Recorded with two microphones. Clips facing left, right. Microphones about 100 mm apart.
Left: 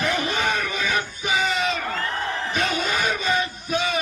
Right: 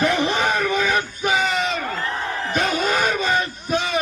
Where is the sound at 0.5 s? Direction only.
35° right (ahead or behind).